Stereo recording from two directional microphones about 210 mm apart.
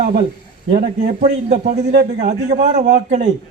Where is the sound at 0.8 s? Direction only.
35° right (ahead or behind).